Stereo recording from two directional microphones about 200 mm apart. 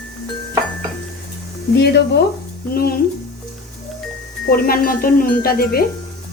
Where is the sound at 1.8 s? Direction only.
55° left (ahead or behind).